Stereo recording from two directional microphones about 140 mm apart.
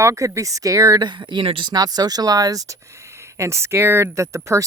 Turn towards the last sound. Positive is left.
turn(degrees=-20)  # may be behind; listen again after turning